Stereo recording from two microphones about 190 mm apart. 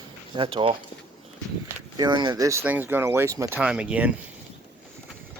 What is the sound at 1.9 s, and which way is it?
Speech, 20° right (ahead or behind).